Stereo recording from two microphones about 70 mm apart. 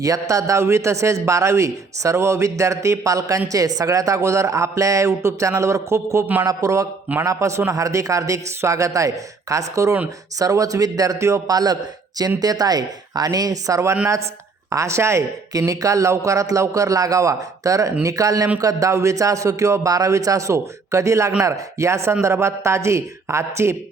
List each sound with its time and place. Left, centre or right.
0.0 s speech: right
6.4 s speech: right
7.3 s speech: right